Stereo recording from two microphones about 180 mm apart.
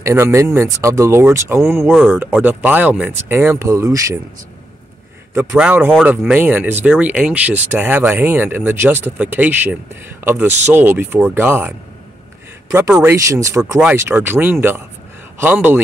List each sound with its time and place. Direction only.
0.0 s speech: 15° right (ahead or behind)
5.3 s speech: 15° right (ahead or behind)
12.9 s speech: 15° right (ahead or behind)